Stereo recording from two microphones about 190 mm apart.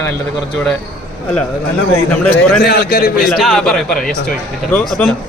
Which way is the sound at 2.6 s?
55° left (ahead or behind).